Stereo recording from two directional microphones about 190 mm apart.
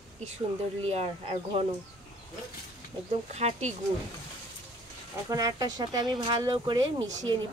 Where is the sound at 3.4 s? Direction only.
35° right (ahead or behind).